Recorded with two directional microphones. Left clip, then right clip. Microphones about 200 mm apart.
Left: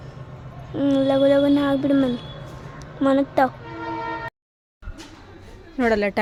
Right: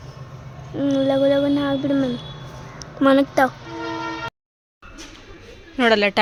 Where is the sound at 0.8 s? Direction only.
Centre (ahead or behind).